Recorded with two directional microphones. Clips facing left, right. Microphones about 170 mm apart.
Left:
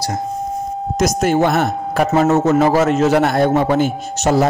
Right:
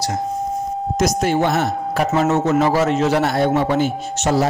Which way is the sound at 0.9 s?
45° left (ahead or behind).